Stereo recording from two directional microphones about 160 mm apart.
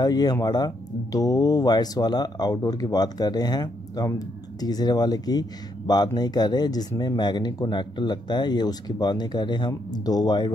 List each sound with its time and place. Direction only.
0.0 s speech: 25° left (ahead or behind)